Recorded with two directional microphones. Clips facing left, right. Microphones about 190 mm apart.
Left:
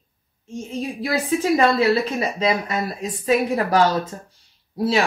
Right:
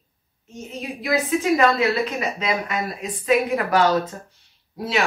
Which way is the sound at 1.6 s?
30° left (ahead or behind).